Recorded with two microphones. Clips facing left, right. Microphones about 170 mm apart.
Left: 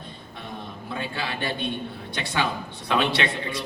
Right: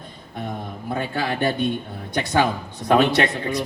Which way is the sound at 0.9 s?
45° right (ahead or behind).